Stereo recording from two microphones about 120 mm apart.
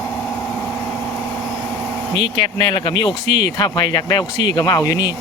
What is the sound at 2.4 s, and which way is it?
Speech, 40° left (ahead or behind).